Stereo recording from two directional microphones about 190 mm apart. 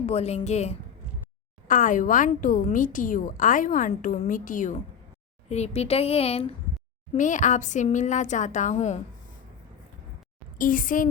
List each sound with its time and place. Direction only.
0.0 s a woman's voice: 35° left (ahead or behind)
10.6 s a woman's voice: 45° left (ahead or behind)